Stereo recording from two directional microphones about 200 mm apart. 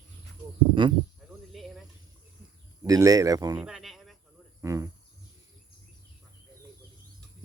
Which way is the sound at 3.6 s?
5° right (ahead or behind).